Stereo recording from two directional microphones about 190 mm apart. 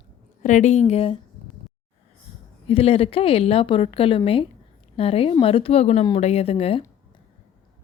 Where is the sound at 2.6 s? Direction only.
30° left (ahead or behind).